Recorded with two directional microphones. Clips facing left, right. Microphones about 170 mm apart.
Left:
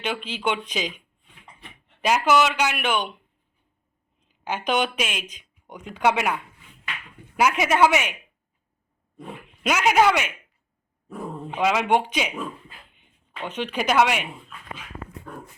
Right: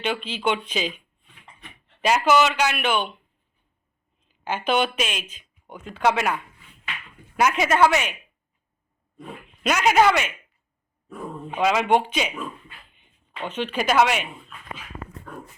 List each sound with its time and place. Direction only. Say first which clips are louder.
0.0 s a man's voice: right 2 dB; 10° left (ahead or behind)
4.4 s a man's voice: right 1 dB; 10° left (ahead or behind)
9.6 s a man's voice: right 1 dB; 10° left (ahead or behind)
11.5 s a man's voice: right 1 dB; 10° left (ahead or behind)
13.5 s a man's voice: right 1 dB; 10° left (ahead or behind)